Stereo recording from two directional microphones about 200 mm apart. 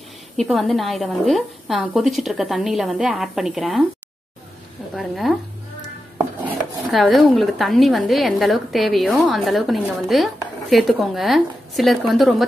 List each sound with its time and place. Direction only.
0.4 s a woman's voice: centre (ahead or behind)
4.9 s a woman's voice: centre (ahead or behind)
6.9 s a woman's voice: centre (ahead or behind)